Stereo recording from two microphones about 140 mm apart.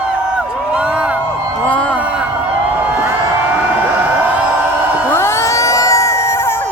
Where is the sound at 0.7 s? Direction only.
5° right (ahead or behind).